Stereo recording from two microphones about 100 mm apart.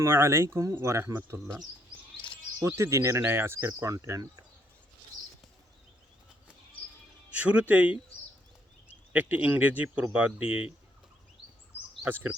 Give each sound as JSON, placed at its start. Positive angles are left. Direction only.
{"t": 0.0, "sound": "speech", "side_deg": -25}
{"t": 2.6, "sound": "speech", "side_deg": -30}
{"t": 7.3, "sound": "speech", "side_deg": -15}
{"t": 12.0, "sound": "speech", "side_deg": -20}